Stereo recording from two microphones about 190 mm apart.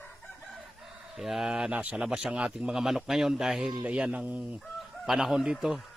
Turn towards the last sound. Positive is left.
turn(degrees=0)  # may be behind; listen again after turning